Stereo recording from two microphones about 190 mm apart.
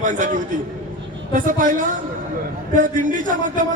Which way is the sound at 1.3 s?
45° right (ahead or behind).